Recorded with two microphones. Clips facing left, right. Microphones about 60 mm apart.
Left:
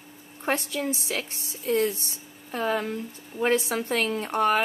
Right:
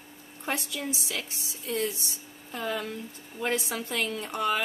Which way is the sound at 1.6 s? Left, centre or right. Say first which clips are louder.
Left 6 dB; left.